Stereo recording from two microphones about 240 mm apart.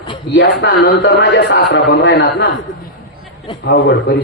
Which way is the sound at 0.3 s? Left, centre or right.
Left.